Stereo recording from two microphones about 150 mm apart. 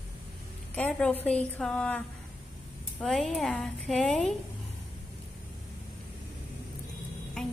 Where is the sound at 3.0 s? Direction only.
Centre (ahead or behind).